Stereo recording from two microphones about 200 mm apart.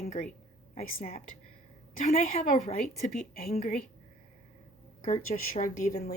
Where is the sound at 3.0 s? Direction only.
50° left (ahead or behind).